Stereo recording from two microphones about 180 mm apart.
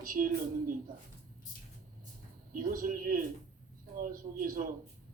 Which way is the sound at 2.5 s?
50° right (ahead or behind).